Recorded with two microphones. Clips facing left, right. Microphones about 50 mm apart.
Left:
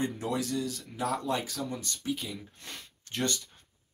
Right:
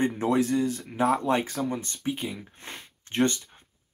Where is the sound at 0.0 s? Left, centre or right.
Right.